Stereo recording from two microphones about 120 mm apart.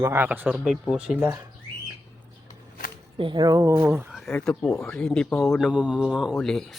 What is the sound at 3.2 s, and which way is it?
Speech, 40° right (ahead or behind).